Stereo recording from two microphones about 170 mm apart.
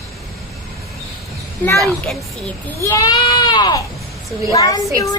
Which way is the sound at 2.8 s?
20° left (ahead or behind).